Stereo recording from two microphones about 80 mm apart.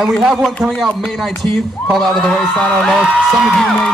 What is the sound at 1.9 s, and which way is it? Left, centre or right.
Speech, centre.